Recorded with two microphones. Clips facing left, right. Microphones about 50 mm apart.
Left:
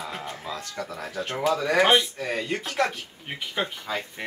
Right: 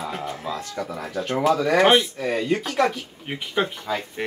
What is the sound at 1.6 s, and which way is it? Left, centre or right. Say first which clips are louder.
Speech: right 1 dB; centre.